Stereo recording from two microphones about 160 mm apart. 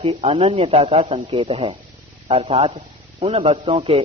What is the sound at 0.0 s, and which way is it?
Speech, 35° right (ahead or behind).